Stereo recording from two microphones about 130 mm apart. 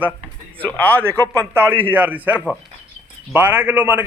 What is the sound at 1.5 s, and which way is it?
A man's voice, 15° right (ahead or behind).